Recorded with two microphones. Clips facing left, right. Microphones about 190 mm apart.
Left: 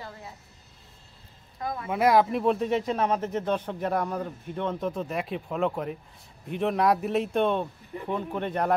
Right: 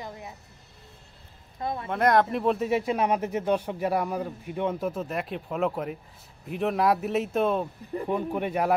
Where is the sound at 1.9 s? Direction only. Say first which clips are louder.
Left 1 dB; 5° left (ahead or behind).